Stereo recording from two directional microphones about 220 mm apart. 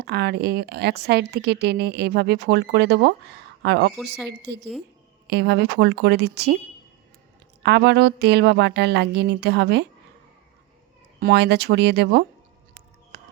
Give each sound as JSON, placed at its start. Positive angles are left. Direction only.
{"t": 0.0, "sound": "speech", "side_deg": -45}
{"t": 7.6, "sound": "speech", "side_deg": -50}
{"t": 11.2, "sound": "speech", "side_deg": -50}
{"t": 13.1, "sound": "a sound", "side_deg": -45}